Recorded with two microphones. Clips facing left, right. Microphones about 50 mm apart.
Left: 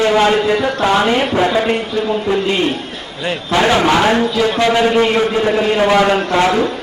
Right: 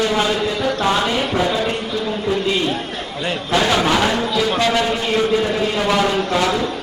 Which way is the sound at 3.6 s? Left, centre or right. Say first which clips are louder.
Left 4 dB; left.